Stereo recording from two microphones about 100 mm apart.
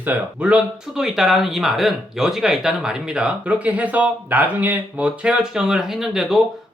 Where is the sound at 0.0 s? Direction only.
15° right (ahead or behind).